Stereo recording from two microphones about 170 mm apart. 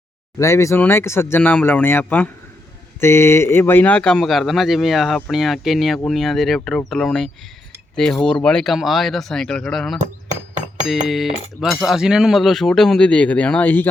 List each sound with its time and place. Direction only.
0.3 s speech: 15° left (ahead or behind); by 10.0 s centre (ahead or behind)
10.0 s chink: 45° right (ahead or behind)
10.8 s speech: centre (ahead or behind)